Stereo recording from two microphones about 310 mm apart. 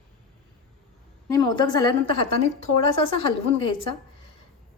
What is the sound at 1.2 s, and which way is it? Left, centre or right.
A woman's voice, centre.